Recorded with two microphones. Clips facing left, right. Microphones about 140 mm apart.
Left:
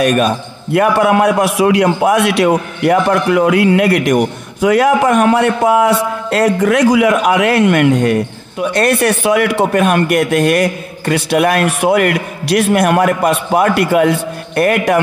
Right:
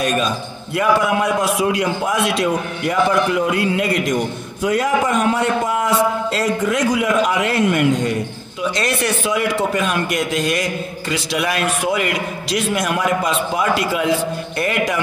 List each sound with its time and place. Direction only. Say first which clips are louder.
0.0 s a man's voice: left 7 dB; 65° left (ahead or behind)